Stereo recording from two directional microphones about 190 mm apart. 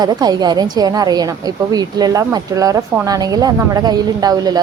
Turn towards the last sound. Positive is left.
turn(degrees=-20)  # may be behind; listen again after turning